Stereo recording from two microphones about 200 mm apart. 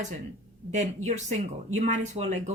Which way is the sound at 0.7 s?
35° right (ahead or behind).